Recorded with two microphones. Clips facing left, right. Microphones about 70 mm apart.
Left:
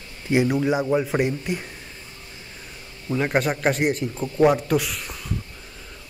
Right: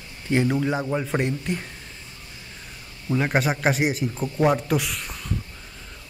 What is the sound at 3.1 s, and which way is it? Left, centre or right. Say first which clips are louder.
A man's voice: even; centre.